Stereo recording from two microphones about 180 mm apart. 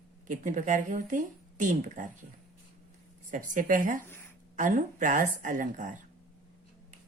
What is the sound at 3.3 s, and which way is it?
Speech, 45° right (ahead or behind).